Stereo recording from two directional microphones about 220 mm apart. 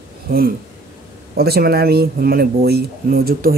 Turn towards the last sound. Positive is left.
turn(degrees=-40)  # may be behind; listen again after turning